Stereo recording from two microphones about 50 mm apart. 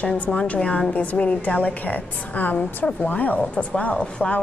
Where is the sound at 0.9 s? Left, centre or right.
Left.